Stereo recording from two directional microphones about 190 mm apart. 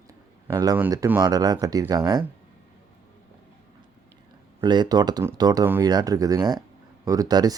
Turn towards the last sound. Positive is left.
turn(degrees=-20)  # may be behind; listen again after turning